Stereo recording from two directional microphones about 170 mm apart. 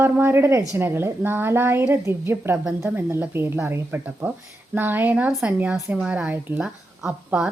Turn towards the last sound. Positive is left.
turn(degrees=-5)  # may be behind; listen again after turning